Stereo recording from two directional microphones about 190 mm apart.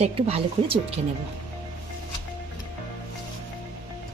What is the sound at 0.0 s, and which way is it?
Speech, 30° right (ahead or behind).